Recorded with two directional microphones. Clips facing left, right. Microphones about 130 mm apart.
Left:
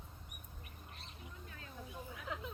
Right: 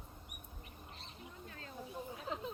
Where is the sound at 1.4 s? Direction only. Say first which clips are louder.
Right 4 dB; 35° right (ahead or behind).